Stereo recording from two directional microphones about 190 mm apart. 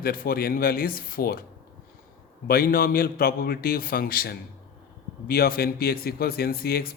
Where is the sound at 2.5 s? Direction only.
50° left (ahead or behind).